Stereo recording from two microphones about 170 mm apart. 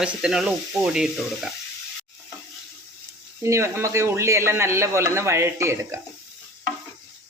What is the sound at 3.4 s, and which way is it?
A man's voice, 15° right (ahead or behind).